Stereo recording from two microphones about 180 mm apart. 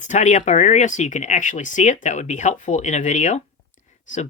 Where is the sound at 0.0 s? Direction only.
40° left (ahead or behind).